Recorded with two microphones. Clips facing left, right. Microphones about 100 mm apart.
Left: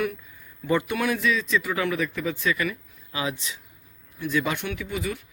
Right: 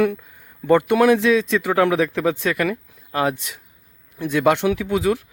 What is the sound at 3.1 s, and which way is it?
Speech, 55° right (ahead or behind).